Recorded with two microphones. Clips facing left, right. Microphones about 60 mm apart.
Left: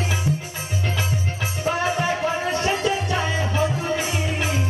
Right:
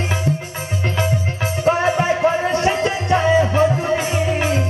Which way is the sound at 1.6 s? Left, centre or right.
Right.